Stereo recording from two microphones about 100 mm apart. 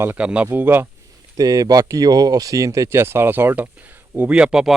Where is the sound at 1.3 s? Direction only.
40° right (ahead or behind).